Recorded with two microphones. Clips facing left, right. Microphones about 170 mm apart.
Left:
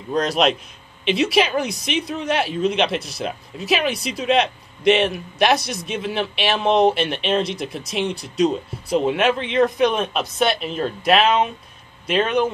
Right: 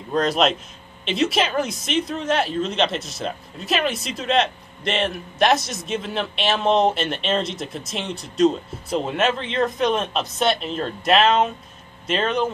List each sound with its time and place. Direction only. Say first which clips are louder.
0.1 s a man's voice: left 1 dB; centre (ahead or behind)
7.0 s a man's voice: left 2 dB; centre (ahead or behind)